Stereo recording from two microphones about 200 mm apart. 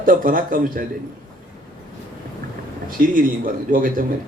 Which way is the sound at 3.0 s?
45° right (ahead or behind).